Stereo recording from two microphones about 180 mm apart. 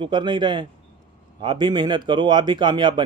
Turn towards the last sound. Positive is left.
turn(degrees=-25)  # may be behind; listen again after turning